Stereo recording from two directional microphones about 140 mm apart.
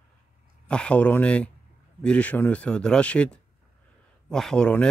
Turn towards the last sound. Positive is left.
turn(degrees=5)  # may be behind; listen again after turning